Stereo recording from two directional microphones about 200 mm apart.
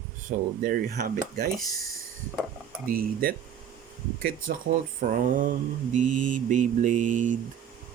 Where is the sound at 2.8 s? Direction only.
45° right (ahead or behind).